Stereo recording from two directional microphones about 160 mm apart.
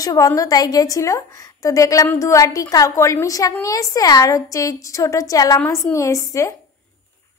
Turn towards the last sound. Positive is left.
turn(degrees=20)  # may be behind; listen again after turning